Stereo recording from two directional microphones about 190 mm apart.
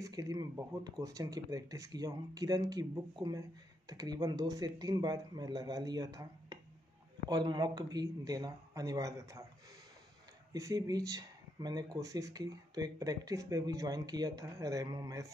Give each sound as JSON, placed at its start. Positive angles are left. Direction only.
{"t": 0.0, "sound": "speech", "side_deg": -20}
{"t": 10.5, "sound": "speech", "side_deg": -20}